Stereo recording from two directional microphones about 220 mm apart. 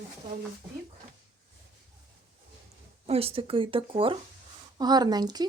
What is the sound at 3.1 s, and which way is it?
Speech, 25° right (ahead or behind).